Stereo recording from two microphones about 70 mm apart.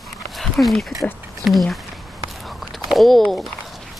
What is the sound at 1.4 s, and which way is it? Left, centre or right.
Speech, centre.